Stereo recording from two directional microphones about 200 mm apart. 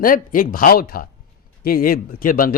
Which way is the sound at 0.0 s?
45° left (ahead or behind).